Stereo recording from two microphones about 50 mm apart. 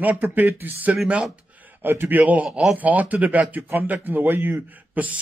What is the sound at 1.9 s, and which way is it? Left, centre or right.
Speech, right.